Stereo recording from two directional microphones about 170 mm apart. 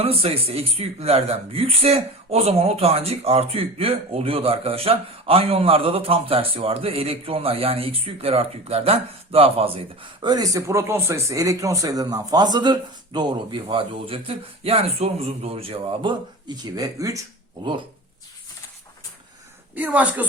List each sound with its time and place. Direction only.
0.0 s speech: 35° right (ahead or behind); by 17.2 s 20° right (ahead or behind)
19.7 s a woman's voice: 10° right (ahead or behind)